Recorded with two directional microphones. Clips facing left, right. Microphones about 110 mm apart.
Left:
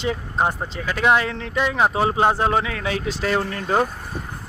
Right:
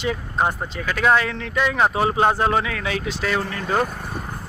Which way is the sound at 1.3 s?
30° left (ahead or behind).